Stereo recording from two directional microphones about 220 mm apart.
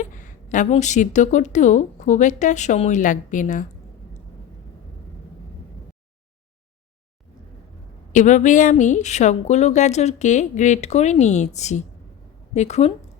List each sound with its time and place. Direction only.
0.0 s a woman's voice: 35° left (ahead or behind)
8.1 s a woman's voice: 35° left (ahead or behind)